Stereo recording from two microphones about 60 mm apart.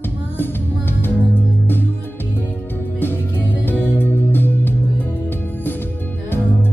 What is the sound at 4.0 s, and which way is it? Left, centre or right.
Music, left.